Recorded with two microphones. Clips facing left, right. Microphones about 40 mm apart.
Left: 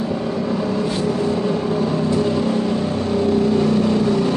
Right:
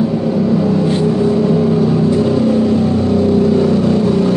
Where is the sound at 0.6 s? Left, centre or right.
Centre.